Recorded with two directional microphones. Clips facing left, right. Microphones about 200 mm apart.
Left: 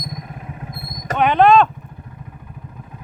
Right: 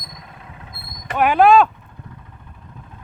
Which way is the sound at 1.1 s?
5° right (ahead or behind).